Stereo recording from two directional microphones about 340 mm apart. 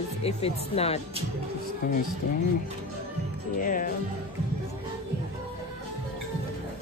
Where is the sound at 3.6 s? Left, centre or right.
Left.